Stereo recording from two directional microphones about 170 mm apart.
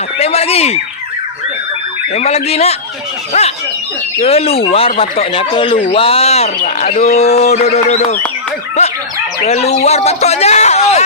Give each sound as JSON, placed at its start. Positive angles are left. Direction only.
{"t": 0.2, "sound": "a sound", "side_deg": 35}
{"t": 2.1, "sound": "a man's voice", "side_deg": 40}
{"t": 9.4, "sound": "a man's voice", "side_deg": 40}